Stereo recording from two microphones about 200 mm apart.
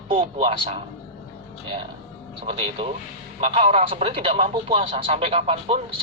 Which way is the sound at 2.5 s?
30° right (ahead or behind).